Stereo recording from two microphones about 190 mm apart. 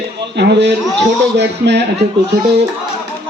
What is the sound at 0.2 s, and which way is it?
A man's voice, 65° right (ahead or behind).